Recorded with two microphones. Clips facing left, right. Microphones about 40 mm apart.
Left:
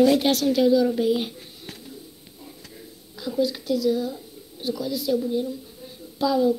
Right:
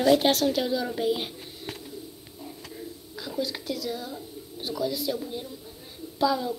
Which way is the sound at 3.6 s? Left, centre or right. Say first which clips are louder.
Left 9 dB; right.